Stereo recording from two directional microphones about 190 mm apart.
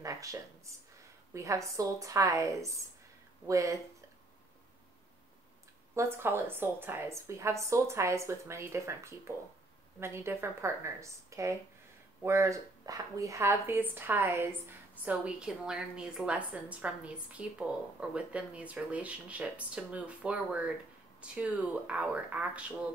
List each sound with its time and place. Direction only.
0.0 s a sound: 15° right (ahead or behind)
1.3 s a woman's voice: 15° right (ahead or behind)
5.9 s a woman's voice: 10° right (ahead or behind)